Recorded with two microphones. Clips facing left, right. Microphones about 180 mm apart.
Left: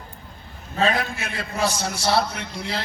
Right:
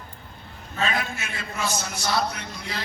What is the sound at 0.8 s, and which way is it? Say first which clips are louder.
A man's voice: left 5 dB; 35° left (ahead or behind).